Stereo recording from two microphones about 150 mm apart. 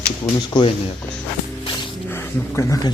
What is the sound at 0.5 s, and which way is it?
Speech, 30° left (ahead or behind).